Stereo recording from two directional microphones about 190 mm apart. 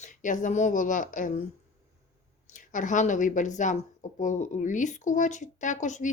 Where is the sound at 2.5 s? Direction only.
40° left (ahead or behind).